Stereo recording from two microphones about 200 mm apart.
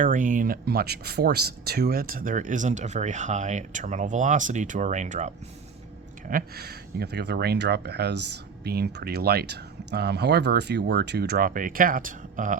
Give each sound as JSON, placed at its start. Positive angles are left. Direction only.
{"t": 0.0, "sound": "speech", "side_deg": -40}
{"t": 6.2, "sound": "speech", "side_deg": -45}